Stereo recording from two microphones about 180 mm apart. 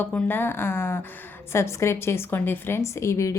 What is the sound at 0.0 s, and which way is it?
A woman's voice, 10° left (ahead or behind).